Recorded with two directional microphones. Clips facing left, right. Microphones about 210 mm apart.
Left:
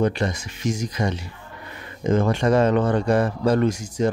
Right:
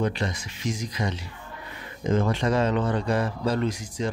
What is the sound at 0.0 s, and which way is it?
Speech, 45° left (ahead or behind).